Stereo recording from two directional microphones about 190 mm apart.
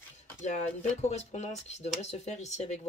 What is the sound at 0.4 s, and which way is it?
Speech, 40° left (ahead or behind).